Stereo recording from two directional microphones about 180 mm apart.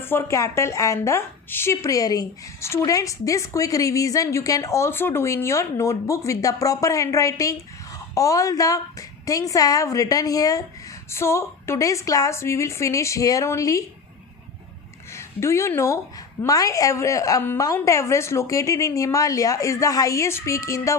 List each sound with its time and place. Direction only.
0.0 s a woman's voice: 15° left (ahead or behind)
15.1 s a woman's voice: 15° left (ahead or behind)